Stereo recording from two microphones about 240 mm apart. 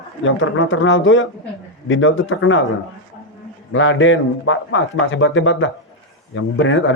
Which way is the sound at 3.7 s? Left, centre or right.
Left.